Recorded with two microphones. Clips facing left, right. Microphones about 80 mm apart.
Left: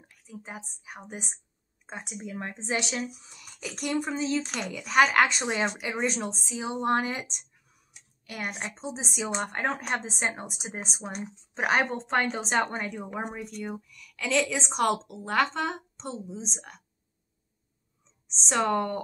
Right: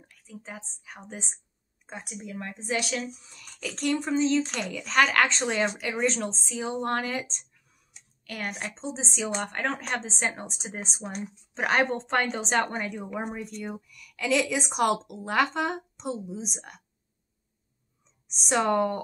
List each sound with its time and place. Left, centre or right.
0.1 s a woman's voice: centre
18.2 s speech: centre